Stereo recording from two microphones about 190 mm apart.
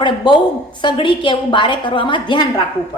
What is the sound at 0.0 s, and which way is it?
A woman's voice, 25° left (ahead or behind).